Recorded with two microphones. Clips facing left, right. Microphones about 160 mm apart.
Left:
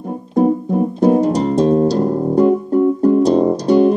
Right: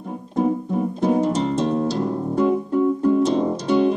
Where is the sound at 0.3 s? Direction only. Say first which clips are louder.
Left 6 dB; 40° left (ahead or behind).